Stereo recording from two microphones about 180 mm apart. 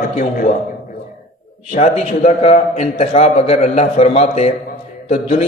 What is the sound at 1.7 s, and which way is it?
A man's voice, 40° left (ahead or behind).